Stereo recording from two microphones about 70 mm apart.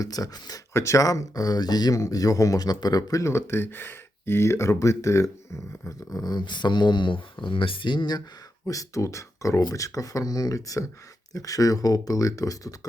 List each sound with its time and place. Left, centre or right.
0.0 s speech: left
0.7 s speech: left
1.9 s speech: left
6.1 s speech: left
8.6 s speech: left